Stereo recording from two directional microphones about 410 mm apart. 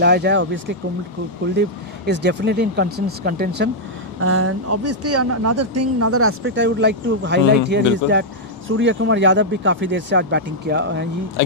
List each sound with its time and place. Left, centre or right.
0.0 s speech: right
2.0 s speech: right
4.2 s speech: right